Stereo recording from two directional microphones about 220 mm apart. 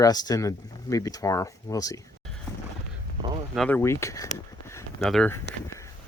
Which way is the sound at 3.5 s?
5° left (ahead or behind).